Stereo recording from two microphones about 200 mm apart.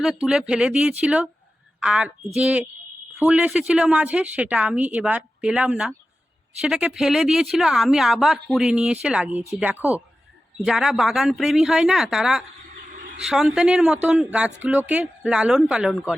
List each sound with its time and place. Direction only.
0.0 s speech: centre (ahead or behind)
12.9 s a sound: 40° right (ahead or behind)
13.2 s speech: centre (ahead or behind)